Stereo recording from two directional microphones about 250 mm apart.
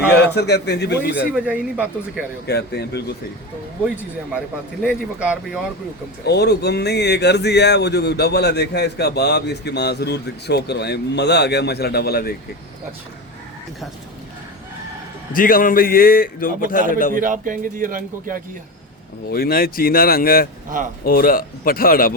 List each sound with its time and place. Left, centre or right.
0.2 s speech: left
1.2 s speech: centre
2.5 s speech: left
4.8 s speech: centre
6.2 s speech: left
15.3 s speech: left
17.2 s a man's voice: right
19.3 s speech: left